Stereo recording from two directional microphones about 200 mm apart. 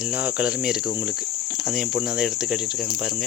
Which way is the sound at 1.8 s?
5° right (ahead or behind).